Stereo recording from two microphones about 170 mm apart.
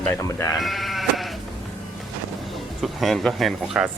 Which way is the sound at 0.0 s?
15° left (ahead or behind).